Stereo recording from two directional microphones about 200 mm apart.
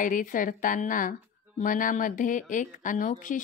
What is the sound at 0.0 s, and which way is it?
Speech, 40° left (ahead or behind).